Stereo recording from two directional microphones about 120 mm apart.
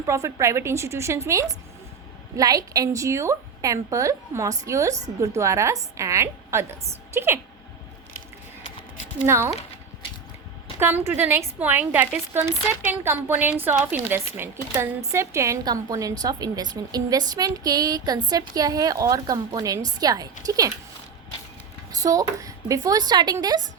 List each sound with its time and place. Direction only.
0.0 s a woman's voice: 25° right (ahead or behind)
9.2 s a woman's voice: 20° right (ahead or behind)
10.8 s a woman's voice: 20° right (ahead or behind)
22.0 s speech: 30° right (ahead or behind)